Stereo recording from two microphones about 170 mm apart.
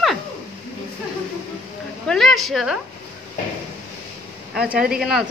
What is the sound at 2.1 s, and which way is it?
Speech, centre (ahead or behind).